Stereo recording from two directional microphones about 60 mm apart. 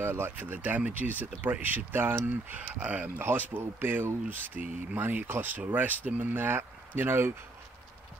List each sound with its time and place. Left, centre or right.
0.0 s speech: right
0.4 s speech: right
2.6 s speech: right